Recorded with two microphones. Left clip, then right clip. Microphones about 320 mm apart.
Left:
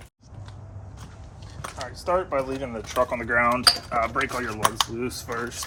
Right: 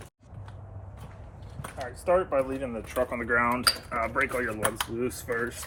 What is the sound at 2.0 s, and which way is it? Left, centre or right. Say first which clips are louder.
Speech: even; centre.